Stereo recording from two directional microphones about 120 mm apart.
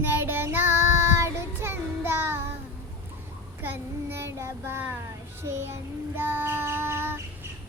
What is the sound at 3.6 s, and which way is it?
Child singing, 20° right (ahead or behind).